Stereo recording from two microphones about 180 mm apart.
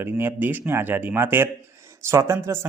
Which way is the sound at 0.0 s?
10° right (ahead or behind).